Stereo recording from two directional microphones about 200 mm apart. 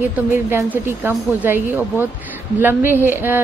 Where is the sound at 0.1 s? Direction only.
10° right (ahead or behind).